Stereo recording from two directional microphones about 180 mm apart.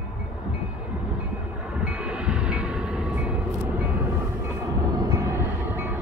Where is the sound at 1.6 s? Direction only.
5° right (ahead or behind).